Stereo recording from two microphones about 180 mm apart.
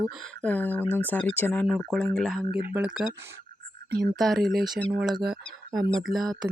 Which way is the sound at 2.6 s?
10° right (ahead or behind).